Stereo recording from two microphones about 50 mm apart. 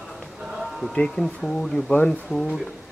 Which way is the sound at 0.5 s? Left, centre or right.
Centre.